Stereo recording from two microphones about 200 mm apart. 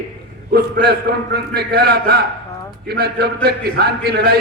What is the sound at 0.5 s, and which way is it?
A man's voice, 55° right (ahead or behind).